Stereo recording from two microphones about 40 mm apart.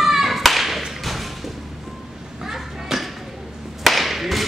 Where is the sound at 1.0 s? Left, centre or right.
Centre.